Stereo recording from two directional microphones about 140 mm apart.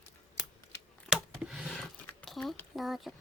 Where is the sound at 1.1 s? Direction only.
5° right (ahead or behind).